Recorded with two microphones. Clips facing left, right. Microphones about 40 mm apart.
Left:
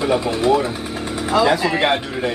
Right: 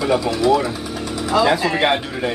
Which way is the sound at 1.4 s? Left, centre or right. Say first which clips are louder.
Even; centre.